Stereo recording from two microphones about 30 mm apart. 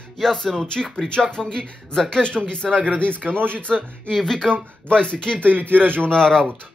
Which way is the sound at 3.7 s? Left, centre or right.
Centre.